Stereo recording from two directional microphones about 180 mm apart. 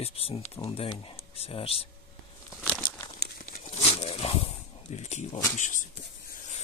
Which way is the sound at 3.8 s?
35° left (ahead or behind).